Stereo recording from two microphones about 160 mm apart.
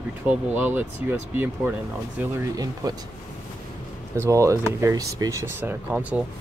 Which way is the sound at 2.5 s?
25° right (ahead or behind).